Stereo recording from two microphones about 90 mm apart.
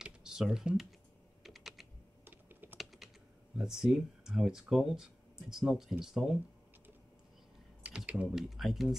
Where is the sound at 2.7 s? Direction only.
Centre (ahead or behind).